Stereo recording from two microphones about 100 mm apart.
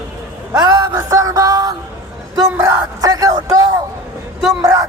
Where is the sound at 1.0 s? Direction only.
35° right (ahead or behind).